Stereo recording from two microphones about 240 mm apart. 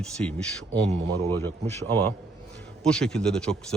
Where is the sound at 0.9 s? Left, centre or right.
Right.